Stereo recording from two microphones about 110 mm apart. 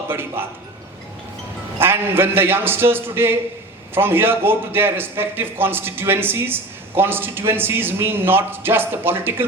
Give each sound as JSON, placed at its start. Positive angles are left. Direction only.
{"t": 0.1, "sound": "a man's voice", "side_deg": -20}
{"t": 1.8, "sound": "a man's voice", "side_deg": -20}